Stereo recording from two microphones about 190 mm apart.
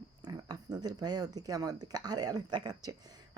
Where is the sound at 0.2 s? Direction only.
20° right (ahead or behind).